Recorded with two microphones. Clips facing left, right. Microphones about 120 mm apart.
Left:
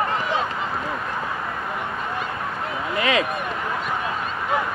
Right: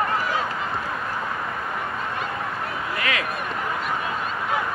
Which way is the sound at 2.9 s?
20° left (ahead or behind).